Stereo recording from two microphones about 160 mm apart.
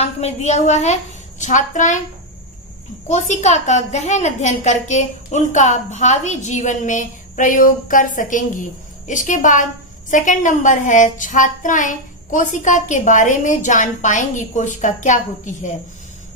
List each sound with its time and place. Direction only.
0.0 s a child's voice: 45° left (ahead or behind)
3.1 s a child's voice: 45° left (ahead or behind)